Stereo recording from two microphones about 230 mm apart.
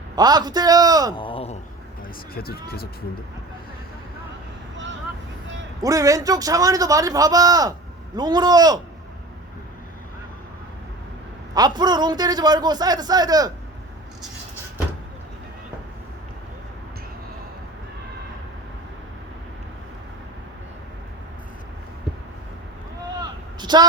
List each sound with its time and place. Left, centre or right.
0.2 s a man's voice: centre
1.1 s a sound: left
2.3 s speech: left
5.8 s a man's voice: centre
11.5 s a man's voice: centre
23.6 s a sound: centre